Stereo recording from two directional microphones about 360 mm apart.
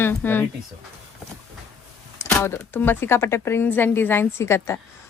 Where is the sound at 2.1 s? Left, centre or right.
Centre.